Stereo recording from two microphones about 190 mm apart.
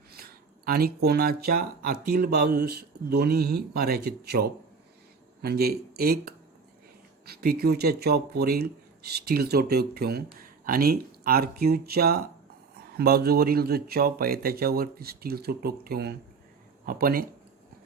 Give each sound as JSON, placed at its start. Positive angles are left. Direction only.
{"t": 0.1, "sound": "speech", "side_deg": -55}